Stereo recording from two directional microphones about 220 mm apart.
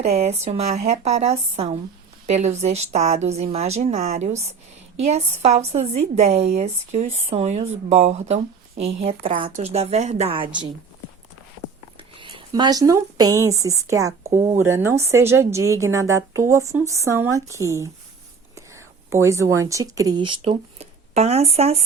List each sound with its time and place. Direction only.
0.2 s a woman's voice: 30° right (ahead or behind)
11.9 s speech: 25° right (ahead or behind)